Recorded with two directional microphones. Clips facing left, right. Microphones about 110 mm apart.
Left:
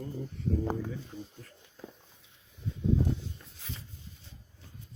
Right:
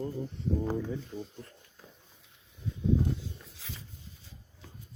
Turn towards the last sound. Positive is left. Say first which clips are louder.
# left 1 dB
turn(degrees=0)  # may be behind; listen again after turning